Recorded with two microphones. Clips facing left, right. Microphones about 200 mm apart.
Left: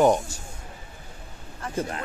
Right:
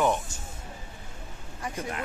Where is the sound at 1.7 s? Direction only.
35° left (ahead or behind).